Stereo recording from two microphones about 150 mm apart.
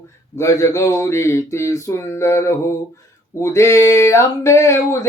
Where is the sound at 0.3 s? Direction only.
20° left (ahead or behind).